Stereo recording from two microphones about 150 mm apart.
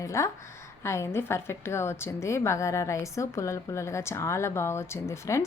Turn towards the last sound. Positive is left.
turn(degrees=20)  # may be behind; listen again after turning